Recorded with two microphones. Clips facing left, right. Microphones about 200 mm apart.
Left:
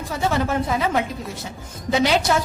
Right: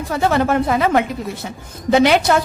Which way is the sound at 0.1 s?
60° right (ahead or behind).